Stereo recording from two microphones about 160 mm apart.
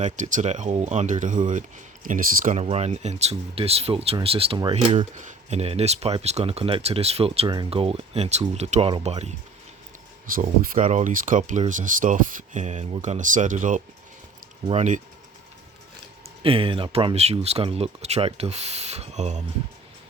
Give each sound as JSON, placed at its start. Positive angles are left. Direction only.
{"t": 0.0, "sound": "speech", "side_deg": -50}
{"t": 2.6, "sound": "speech", "side_deg": -40}
{"t": 10.6, "sound": "speech", "side_deg": -55}
{"t": 16.4, "sound": "speech", "side_deg": -35}